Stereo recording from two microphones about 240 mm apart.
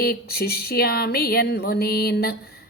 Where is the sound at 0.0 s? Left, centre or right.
Left.